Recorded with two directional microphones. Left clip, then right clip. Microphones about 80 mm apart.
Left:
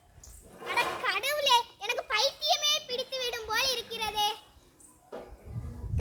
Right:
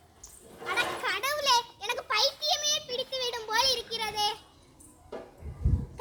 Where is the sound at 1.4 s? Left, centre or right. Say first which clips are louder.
Left 1 dB; right.